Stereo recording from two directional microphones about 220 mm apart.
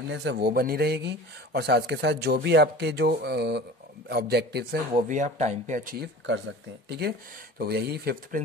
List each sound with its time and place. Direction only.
0.1 s speech: 55° right (ahead or behind)
5.0 s speech: 35° right (ahead or behind)